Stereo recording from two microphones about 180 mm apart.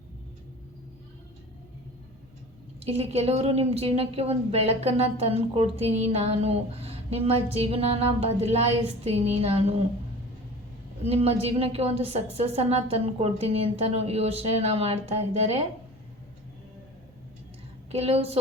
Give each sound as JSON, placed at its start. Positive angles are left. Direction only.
{"t": 2.8, "sound": "a woman's voice", "side_deg": -35}
{"t": 11.0, "sound": "a woman's voice", "side_deg": -35}
{"t": 17.9, "sound": "a woman's voice", "side_deg": -35}